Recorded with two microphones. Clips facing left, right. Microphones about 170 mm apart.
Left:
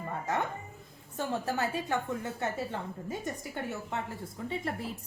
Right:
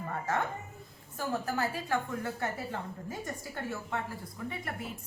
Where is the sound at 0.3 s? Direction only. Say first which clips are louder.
Even; 20° left (ahead or behind).